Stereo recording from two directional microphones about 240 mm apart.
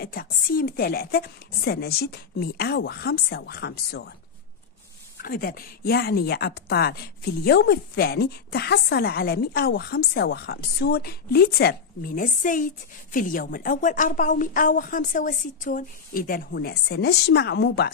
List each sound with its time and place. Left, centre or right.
0.0 s speech: left
5.2 s speech: left